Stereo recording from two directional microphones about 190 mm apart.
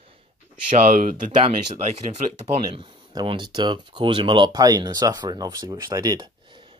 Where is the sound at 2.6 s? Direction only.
25° right (ahead or behind).